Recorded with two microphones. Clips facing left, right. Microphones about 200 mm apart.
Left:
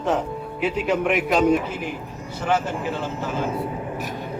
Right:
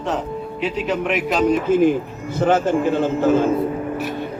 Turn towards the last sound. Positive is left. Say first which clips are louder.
# right 9 dB
turn(degrees=-55)  # may be behind; listen again after turning